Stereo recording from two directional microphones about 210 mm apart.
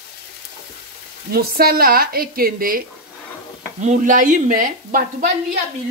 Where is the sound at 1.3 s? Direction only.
45° right (ahead or behind).